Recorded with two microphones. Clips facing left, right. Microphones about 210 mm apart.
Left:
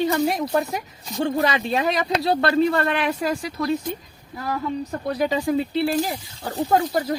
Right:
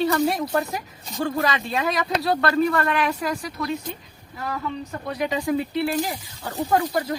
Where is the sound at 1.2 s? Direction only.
30° left (ahead or behind).